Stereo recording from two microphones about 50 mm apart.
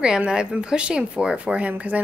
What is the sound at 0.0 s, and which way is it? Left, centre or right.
A woman's voice, centre.